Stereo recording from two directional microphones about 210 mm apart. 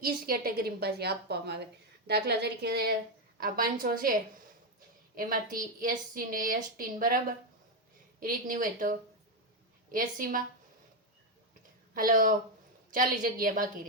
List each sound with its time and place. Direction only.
0.0 s a woman's voice: 45° right (ahead or behind)
5.1 s a woman's voice: 40° right (ahead or behind)
11.9 s a woman's voice: 40° right (ahead or behind)